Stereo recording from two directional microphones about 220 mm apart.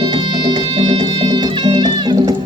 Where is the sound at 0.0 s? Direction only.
20° right (ahead or behind).